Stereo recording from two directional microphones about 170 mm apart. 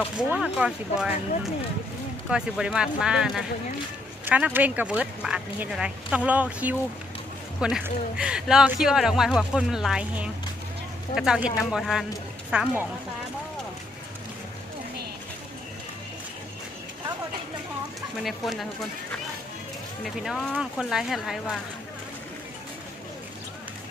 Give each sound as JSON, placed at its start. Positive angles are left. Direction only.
{"t": 0.3, "sound": "speech", "side_deg": -5}
{"t": 2.3, "sound": "speech", "side_deg": -5}
{"t": 18.2, "sound": "speech", "side_deg": 0}
{"t": 20.1, "sound": "speech", "side_deg": 0}